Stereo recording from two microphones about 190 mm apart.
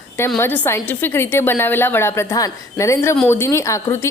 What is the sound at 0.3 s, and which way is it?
Speech, 10° left (ahead or behind).